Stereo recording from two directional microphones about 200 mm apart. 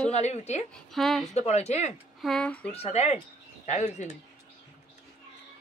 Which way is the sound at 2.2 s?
5° left (ahead or behind).